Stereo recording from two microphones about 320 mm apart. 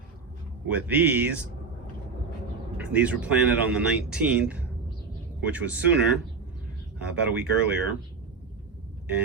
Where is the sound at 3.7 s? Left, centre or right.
Centre.